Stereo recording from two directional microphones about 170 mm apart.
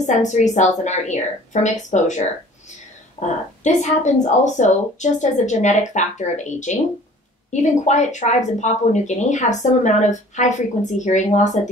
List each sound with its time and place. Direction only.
0.0 s speech: 45° left (ahead or behind)